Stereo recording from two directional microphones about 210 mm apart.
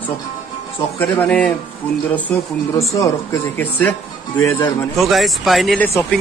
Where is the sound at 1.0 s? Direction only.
5° left (ahead or behind).